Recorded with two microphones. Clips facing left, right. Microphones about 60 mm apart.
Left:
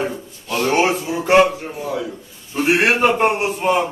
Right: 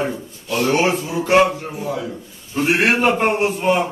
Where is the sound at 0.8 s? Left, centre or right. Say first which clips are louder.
Left 1 dB; centre.